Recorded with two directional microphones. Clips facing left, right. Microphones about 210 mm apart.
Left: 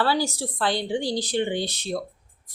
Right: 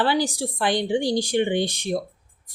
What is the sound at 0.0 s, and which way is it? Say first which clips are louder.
A woman's voice: right 2 dB; 15° right (ahead or behind).